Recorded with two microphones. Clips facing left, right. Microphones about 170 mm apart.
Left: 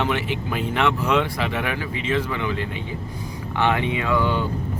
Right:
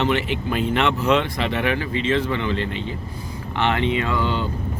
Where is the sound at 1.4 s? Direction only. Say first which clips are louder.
Right 3 dB; 10° left (ahead or behind).